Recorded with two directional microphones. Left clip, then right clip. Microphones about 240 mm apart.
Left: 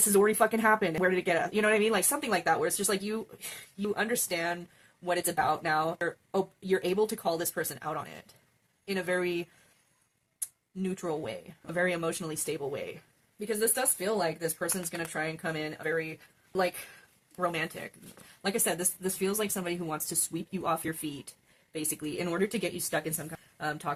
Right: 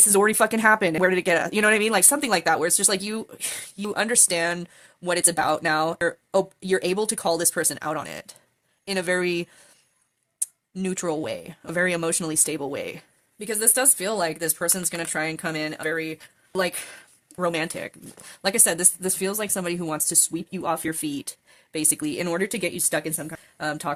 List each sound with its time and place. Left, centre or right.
0.0 s speech: right
10.8 s a woman's voice: right